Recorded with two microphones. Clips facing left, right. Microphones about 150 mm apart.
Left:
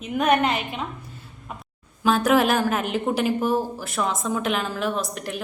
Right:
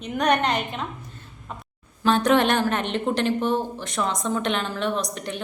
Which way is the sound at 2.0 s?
5° left (ahead or behind).